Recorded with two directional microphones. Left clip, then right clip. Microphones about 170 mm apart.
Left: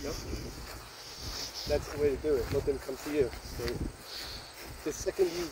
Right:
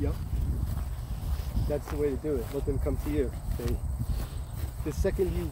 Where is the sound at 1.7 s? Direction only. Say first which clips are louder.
Left 1 dB; 30° left (ahead or behind).